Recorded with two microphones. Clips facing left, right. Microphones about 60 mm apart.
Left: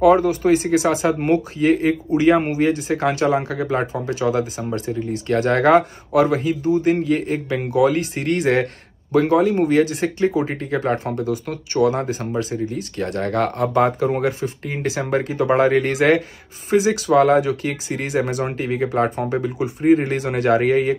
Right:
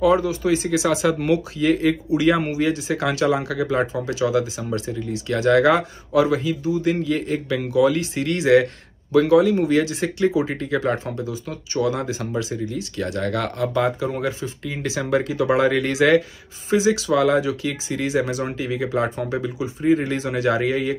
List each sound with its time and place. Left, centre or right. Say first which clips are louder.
0.0 s speech: left 4 dB; left